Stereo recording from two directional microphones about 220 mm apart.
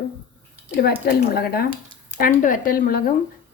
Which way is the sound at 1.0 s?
45° left (ahead or behind).